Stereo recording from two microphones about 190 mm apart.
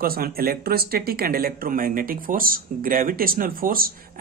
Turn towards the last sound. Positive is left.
turn(degrees=-50)  # may be behind; listen again after turning